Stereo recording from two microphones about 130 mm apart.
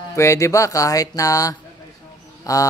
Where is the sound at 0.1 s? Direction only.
20° left (ahead or behind).